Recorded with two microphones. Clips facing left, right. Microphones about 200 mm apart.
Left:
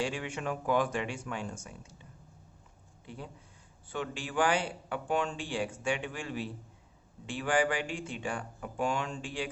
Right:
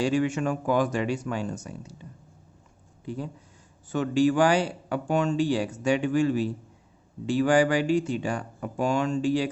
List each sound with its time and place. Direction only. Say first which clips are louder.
0.0 s speech: right 10 dB; 45° right (ahead or behind)
3.8 s speech: right 15 dB; 45° right (ahead or behind)